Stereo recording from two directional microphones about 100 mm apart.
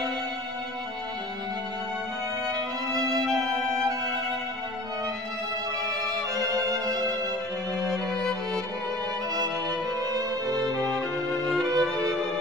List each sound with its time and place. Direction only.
6.3 s music: 40° right (ahead or behind)
10.7 s music: 10° left (ahead or behind)
11.7 s music: 35° right (ahead or behind)